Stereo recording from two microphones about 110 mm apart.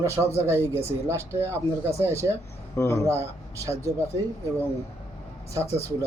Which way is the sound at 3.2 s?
30° right (ahead or behind).